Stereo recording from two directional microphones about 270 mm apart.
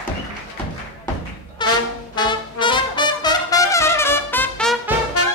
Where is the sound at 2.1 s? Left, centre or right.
Centre.